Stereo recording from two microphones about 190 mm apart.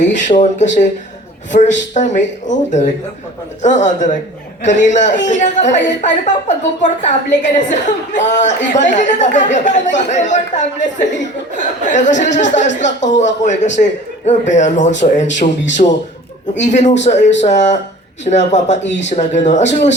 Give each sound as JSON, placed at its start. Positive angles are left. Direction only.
{"t": 0.3, "sound": "a woman's voice", "side_deg": 40}